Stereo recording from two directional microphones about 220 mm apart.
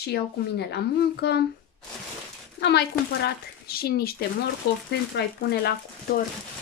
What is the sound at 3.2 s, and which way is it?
Speech, 45° left (ahead or behind).